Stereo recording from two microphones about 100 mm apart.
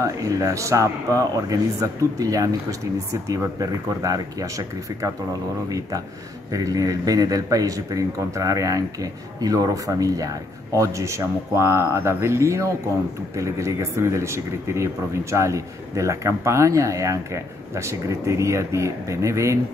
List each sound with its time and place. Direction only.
0.0 s speech: 35° right (ahead or behind)